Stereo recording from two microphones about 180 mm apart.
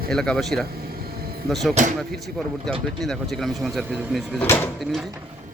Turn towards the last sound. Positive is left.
turn(degrees=10)  # may be behind; listen again after turning